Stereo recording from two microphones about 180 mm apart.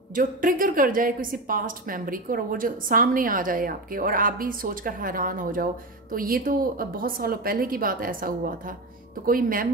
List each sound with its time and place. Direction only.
0.1 s a woman's voice: 50° right (ahead or behind)